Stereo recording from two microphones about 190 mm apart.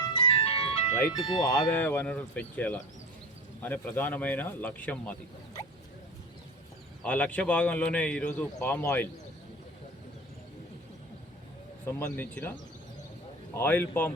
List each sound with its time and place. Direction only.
0.0 s music: 25° left (ahead or behind)
0.9 s a man's voice: 10° left (ahead or behind)
7.0 s a man's voice: 10° left (ahead or behind)
11.9 s a man's voice: 10° left (ahead or behind)